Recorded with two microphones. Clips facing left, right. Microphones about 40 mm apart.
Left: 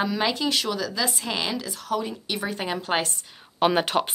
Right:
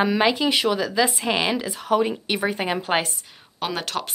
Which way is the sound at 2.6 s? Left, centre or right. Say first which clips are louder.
Right 3 dB; centre.